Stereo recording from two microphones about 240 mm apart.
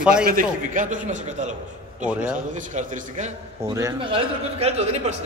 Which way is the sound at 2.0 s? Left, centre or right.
Centre.